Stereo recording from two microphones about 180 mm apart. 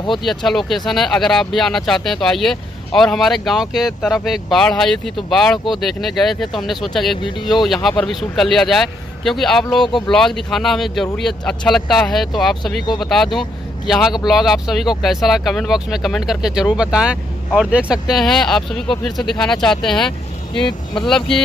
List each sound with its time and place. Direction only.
0.2 s speech: centre (ahead or behind)
7.3 s speech: 25° left (ahead or behind)
7.6 s speech: centre (ahead or behind)
20.6 s speech: 25° left (ahead or behind)